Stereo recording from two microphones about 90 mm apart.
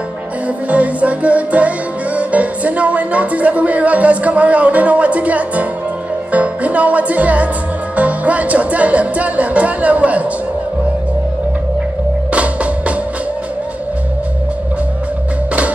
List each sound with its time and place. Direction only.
0.7 s music: 15° right (ahead or behind)
12.3 s music: 15° right (ahead or behind)